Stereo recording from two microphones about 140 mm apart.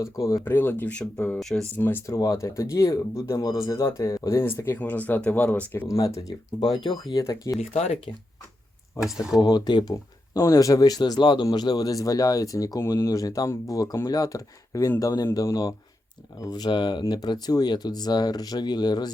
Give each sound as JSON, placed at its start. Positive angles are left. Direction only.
{"t": 0.3, "sound": "speech", "side_deg": 20}
{"t": 1.8, "sound": "speech", "side_deg": 15}
{"t": 5.9, "sound": "speech", "side_deg": 25}
{"t": 7.6, "sound": "speech", "side_deg": 50}
{"t": 9.0, "sound": "speech", "side_deg": -5}
{"t": 9.4, "sound": "speech", "side_deg": 30}